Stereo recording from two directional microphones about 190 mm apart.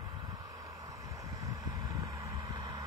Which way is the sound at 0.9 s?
20° right (ahead or behind).